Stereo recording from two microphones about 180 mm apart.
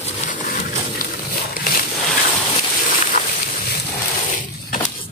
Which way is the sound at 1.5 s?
55° left (ahead or behind).